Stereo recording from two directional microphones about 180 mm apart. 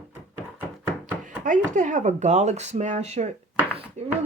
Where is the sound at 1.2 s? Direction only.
45° right (ahead or behind).